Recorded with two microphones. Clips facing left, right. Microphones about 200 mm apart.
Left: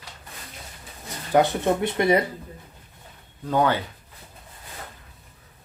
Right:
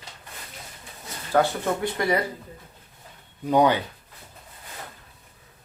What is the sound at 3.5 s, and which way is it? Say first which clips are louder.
Speech: right 2 dB; 15° right (ahead or behind).